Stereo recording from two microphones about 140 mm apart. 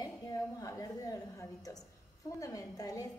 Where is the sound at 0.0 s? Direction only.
25° left (ahead or behind).